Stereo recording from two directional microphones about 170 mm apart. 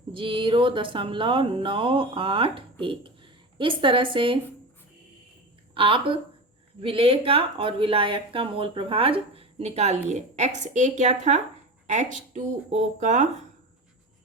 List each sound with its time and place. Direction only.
0.1 s speech: 30° right (ahead or behind)
5.7 s speech: 30° right (ahead or behind)